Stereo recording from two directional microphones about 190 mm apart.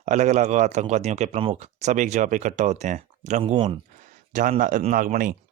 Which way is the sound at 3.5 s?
25° right (ahead or behind).